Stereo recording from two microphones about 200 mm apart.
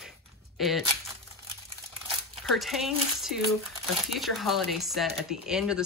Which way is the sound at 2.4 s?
Centre (ahead or behind).